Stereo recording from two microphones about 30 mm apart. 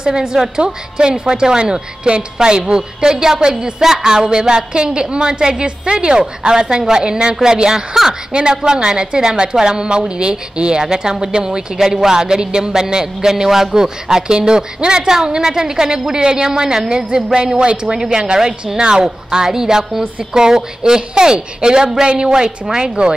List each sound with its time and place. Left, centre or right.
0.0 s a woman's voice: right
1.6 s a woman's voice: right
7.9 s speech: centre
8.3 s a woman's voice: right
12.8 s a woman's voice: centre
19.0 s a woman's voice: centre; by 23.1 s right